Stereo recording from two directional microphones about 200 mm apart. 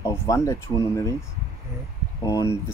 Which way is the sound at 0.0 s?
15° left (ahead or behind).